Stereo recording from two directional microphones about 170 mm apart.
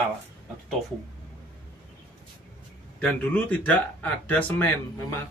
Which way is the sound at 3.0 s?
10° left (ahead or behind).